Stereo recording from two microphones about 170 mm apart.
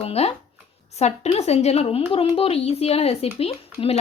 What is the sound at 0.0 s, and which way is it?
Speech, 35° left (ahead or behind).